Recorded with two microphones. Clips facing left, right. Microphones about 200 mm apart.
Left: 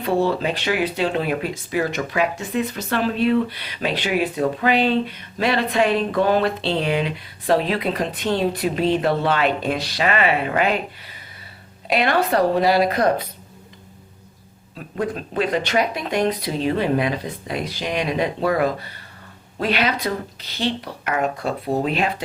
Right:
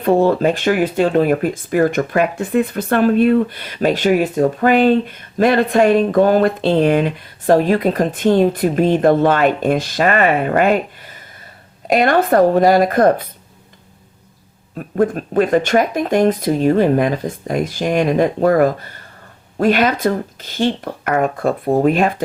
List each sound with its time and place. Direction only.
0.0 s speech: 50° right (ahead or behind)
14.8 s speech: 50° right (ahead or behind)